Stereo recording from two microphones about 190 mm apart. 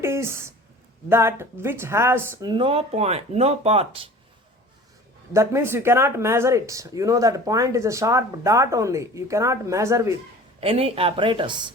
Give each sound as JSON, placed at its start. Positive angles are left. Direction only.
{"t": 0.0, "sound": "speech", "side_deg": -15}
{"t": 2.5, "sound": "speech", "side_deg": -30}
{"t": 5.3, "sound": "speech", "side_deg": -15}
{"t": 10.6, "sound": "speech", "side_deg": -30}